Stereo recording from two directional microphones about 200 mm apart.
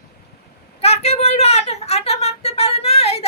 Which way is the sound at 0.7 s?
30° left (ahead or behind).